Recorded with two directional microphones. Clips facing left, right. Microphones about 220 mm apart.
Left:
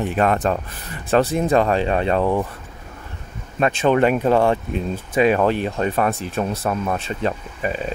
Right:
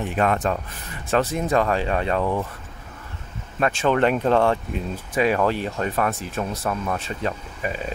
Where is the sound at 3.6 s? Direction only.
20° left (ahead or behind).